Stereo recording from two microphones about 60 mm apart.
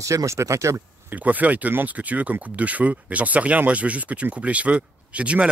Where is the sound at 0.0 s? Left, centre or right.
Right.